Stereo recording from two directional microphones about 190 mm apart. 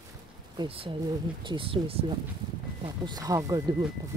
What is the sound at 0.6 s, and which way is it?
Speech, 25° right (ahead or behind).